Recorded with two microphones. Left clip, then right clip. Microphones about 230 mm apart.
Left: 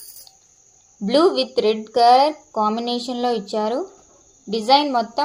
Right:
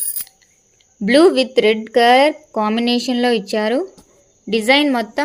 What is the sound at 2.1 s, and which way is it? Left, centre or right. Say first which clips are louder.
A woman's voice: right 3 dB; right.